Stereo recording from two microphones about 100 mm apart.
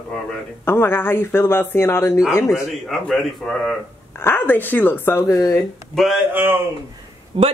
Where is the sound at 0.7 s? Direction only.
25° left (ahead or behind).